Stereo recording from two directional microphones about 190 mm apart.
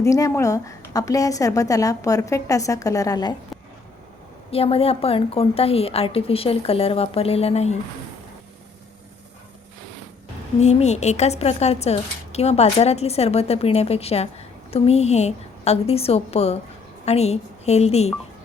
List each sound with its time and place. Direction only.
0.0 s a woman's voice: 15° left (ahead or behind)
4.5 s speech: 30° left (ahead or behind)
10.6 s speech: 35° left (ahead or behind)